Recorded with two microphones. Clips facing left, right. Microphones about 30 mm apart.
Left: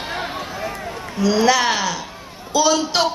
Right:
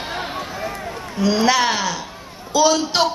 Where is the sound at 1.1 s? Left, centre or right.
Centre.